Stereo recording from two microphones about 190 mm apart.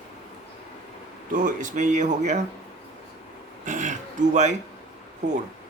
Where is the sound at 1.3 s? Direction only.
45° right (ahead or behind).